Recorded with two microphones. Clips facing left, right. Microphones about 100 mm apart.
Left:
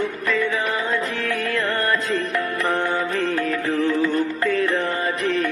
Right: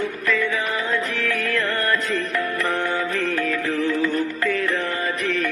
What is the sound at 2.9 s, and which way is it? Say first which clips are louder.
Music: left 1 dB; centre (ahead or behind).